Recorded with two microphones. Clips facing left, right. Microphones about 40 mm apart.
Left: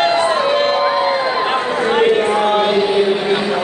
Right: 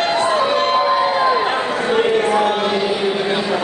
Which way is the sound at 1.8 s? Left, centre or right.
Centre.